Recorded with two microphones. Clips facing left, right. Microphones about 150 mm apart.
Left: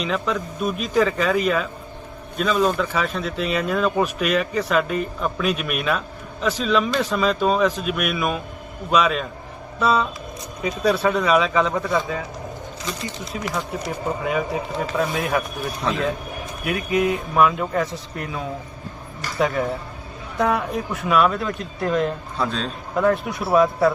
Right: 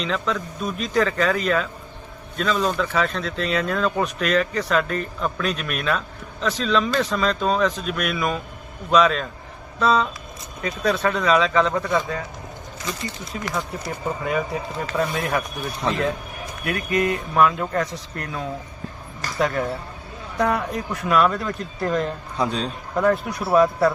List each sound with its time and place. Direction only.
0.0 s speech: 10° left (ahead or behind)
2.4 s speech: 10° left (ahead or behind)
13.3 s speech: centre (ahead or behind)
14.9 s speech: centre (ahead or behind)
22.4 s a man's voice: 15° right (ahead or behind)
23.0 s speech: centre (ahead or behind)